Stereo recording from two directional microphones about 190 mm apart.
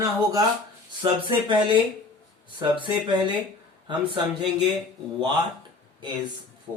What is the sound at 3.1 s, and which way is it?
Speech, 25° right (ahead or behind).